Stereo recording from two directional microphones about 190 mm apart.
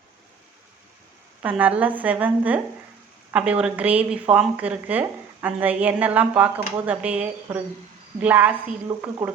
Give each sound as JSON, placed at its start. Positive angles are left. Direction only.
{"t": 1.4, "sound": "a woman's voice", "side_deg": -10}